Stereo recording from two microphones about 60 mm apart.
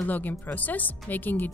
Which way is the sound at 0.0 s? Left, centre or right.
Left.